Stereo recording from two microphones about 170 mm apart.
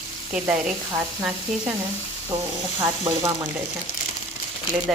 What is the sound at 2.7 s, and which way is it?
Speech, 15° right (ahead or behind).